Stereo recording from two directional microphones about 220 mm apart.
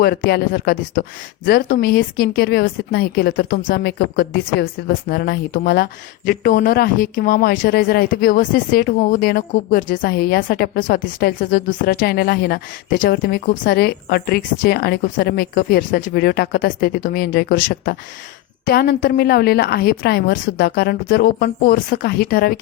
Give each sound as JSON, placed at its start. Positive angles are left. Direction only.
{"t": 0.0, "sound": "a woman's voice", "side_deg": 45}